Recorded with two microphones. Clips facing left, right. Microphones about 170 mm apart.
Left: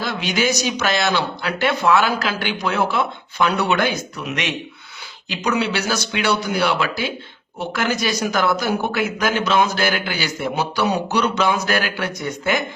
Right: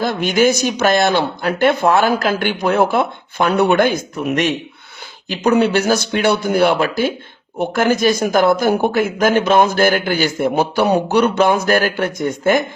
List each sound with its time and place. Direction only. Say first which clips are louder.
0.0 s speech: right 7 dB; 50° right (ahead or behind)